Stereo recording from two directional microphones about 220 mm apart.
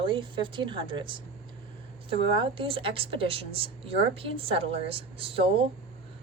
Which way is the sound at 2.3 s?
25° right (ahead or behind).